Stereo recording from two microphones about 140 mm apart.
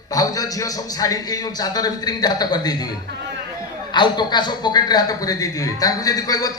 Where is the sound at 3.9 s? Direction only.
30° left (ahead or behind).